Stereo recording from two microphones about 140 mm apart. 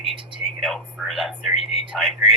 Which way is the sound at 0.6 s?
Centre (ahead or behind).